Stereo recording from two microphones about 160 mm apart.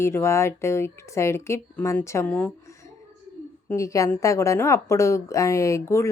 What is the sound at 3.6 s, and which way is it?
A woman's voice, 20° left (ahead or behind).